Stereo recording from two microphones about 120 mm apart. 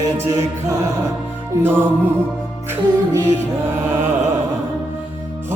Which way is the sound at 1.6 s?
20° right (ahead or behind).